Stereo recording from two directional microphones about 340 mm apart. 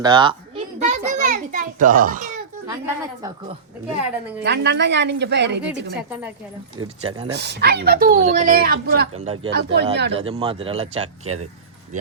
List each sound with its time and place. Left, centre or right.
0.0 s children playing: centre
2.6 s a woman's voice: centre
4.4 s a woman's voice: right
6.0 s a woman's voice: centre
6.8 s speech: centre
7.3 s speech: right
9.4 s a woman's voice: right
10.2 s speech: centre